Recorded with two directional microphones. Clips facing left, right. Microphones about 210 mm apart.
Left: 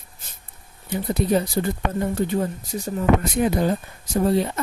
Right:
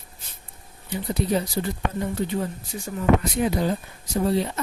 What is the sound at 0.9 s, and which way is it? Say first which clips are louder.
Speech: left 3 dB; 50° left (ahead or behind).